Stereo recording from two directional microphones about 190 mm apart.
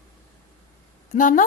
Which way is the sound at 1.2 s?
45° left (ahead or behind).